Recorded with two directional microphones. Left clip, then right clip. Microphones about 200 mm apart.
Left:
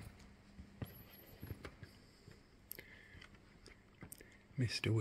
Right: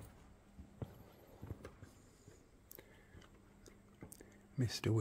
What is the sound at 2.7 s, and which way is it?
Biting, 5° right (ahead or behind).